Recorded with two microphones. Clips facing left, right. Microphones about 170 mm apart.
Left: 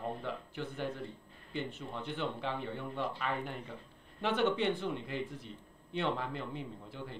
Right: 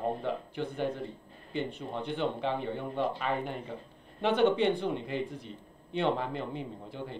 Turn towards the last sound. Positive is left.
turn(degrees=-20)  # may be behind; listen again after turning